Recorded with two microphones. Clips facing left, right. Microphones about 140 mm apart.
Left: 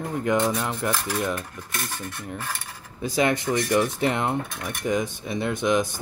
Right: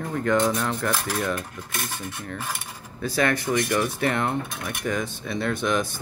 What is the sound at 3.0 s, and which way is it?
Speech, 20° left (ahead or behind).